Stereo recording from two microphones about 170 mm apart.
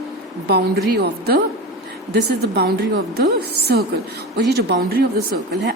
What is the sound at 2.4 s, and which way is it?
Speech, 75° right (ahead or behind).